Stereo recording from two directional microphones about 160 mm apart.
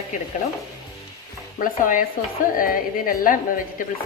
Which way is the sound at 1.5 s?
60° left (ahead or behind).